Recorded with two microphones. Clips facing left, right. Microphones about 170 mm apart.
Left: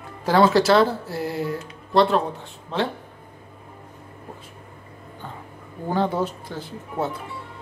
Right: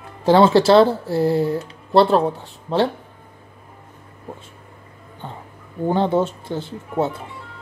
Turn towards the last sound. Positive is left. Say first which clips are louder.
# right 5 dB
turn(degrees=-25)  # may be behind; listen again after turning